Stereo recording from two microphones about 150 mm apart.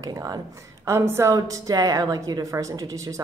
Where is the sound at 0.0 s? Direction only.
25° right (ahead or behind).